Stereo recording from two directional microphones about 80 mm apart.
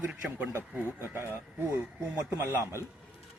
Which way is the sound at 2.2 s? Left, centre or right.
Right.